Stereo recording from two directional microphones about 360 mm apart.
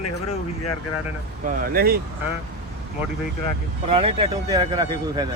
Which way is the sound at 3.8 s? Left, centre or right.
Centre.